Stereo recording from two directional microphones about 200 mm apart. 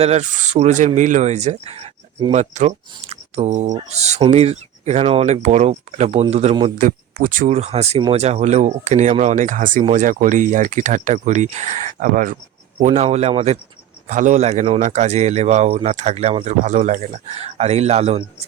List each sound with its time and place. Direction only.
0.0 s speech: 35° right (ahead or behind)
6.7 s speech: 40° right (ahead or behind)